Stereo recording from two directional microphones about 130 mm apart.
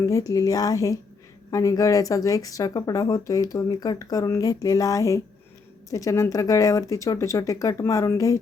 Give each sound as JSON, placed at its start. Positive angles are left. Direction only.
{"t": 0.0, "sound": "speech", "side_deg": 25}